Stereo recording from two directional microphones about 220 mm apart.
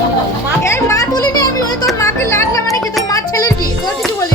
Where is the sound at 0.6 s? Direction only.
15° left (ahead or behind).